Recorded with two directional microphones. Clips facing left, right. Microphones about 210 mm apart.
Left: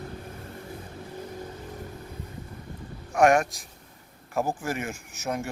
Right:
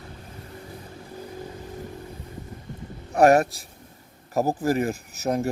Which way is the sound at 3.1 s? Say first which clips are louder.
Right 3 dB; 35° right (ahead or behind).